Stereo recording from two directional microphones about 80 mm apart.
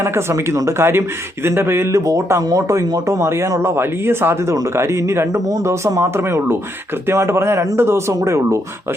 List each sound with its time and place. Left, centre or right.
0.0 s speech: right
5.5 s speech: right